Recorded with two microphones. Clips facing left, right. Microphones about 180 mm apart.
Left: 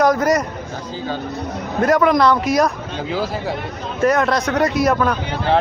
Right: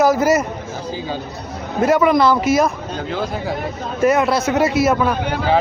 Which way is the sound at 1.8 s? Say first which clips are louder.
Right 1 dB; 5° right (ahead or behind).